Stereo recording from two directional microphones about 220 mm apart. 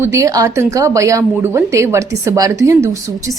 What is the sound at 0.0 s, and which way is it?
A woman's voice, 15° right (ahead or behind).